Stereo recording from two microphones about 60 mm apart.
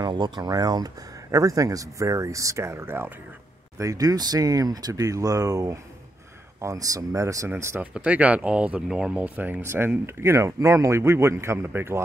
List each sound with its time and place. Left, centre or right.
0.4 s speech: right
3.7 s speech: right
7.4 s speech: right
7.8 s speech: right
9.4 s speech: right
9.7 s speech: right